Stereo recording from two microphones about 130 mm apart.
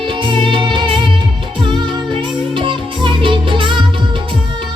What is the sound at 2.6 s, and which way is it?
Music, 40° right (ahead or behind).